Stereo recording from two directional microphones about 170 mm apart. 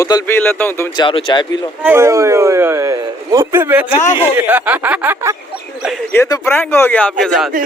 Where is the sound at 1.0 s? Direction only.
30° left (ahead or behind).